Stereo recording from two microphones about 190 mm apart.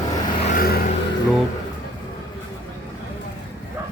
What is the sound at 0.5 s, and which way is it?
Vehicle, 50° left (ahead or behind).